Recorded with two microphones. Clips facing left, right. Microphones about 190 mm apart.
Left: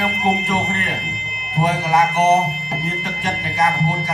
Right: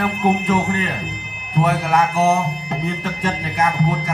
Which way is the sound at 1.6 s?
55° right (ahead or behind).